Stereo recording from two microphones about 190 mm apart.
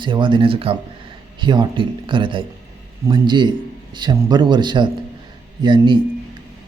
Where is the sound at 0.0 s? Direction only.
25° right (ahead or behind).